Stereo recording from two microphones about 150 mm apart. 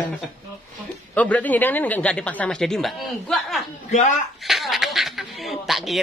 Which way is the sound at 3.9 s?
55° left (ahead or behind).